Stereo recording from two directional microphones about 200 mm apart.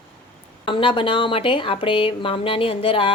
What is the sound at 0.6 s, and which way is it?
Speech, 25° left (ahead or behind).